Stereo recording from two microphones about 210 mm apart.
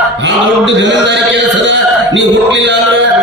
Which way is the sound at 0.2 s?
55° right (ahead or behind).